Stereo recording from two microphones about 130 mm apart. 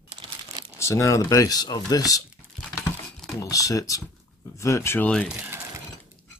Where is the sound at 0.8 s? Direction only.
20° left (ahead or behind).